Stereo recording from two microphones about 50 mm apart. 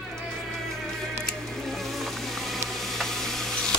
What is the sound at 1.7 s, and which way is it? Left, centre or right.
Music, centre.